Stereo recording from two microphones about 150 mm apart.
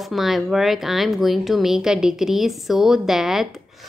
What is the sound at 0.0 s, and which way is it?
A woman's voice, centre (ahead or behind).